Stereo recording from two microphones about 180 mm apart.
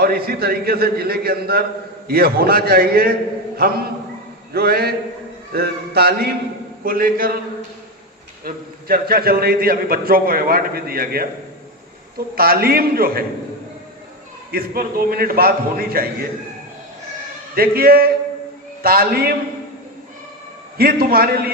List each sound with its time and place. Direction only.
0.3 s a man's voice: 60° right (ahead or behind)
8.4 s a man's voice: 55° right (ahead or behind)
14.5 s a man's voice: 55° right (ahead or behind)
17.5 s a man's voice: 55° right (ahead or behind)
20.7 s a man's voice: 55° right (ahead or behind)